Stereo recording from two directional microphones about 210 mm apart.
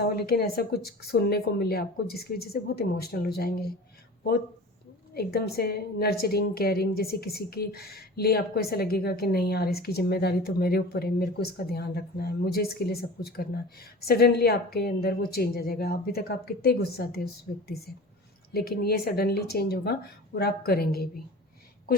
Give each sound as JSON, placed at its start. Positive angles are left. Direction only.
{"t": 0.2, "sound": "a woman's voice", "side_deg": 45}
{"t": 5.1, "sound": "a woman's voice", "side_deg": 50}